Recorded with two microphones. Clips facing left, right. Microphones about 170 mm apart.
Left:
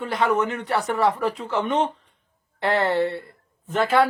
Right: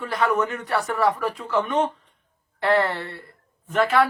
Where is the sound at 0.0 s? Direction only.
25° left (ahead or behind).